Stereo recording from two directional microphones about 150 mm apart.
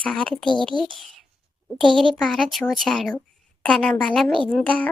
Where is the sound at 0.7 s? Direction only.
35° right (ahead or behind).